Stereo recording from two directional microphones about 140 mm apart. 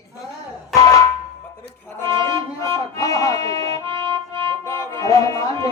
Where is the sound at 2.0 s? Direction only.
20° left (ahead or behind).